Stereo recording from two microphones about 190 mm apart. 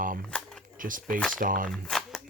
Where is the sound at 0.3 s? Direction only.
5° left (ahead or behind).